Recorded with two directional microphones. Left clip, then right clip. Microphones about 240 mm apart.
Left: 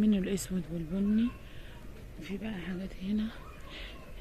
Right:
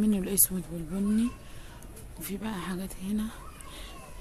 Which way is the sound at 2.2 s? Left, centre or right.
Centre.